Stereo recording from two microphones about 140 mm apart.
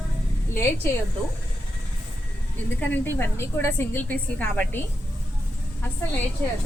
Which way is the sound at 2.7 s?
15° left (ahead or behind).